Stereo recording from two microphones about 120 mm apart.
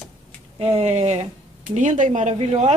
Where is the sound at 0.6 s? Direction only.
60° right (ahead or behind).